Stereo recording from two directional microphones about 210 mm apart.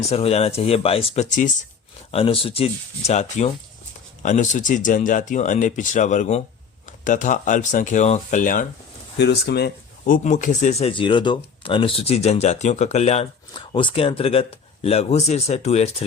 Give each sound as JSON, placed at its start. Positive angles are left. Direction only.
{"t": 0.1, "sound": "speech", "side_deg": 30}
{"t": 9.1, "sound": "speech", "side_deg": 55}
{"t": 10.2, "sound": "speech", "side_deg": 35}